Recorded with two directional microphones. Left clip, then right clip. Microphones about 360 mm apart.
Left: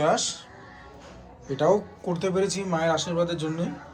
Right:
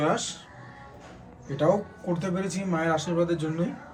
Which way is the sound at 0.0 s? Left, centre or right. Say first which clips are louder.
Left 3 dB; centre.